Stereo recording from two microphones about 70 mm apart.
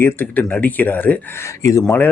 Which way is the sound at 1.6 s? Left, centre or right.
Left.